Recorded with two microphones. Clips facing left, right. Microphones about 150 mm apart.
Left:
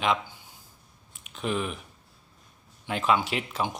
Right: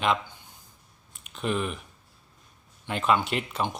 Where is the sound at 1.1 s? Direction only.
Centre (ahead or behind).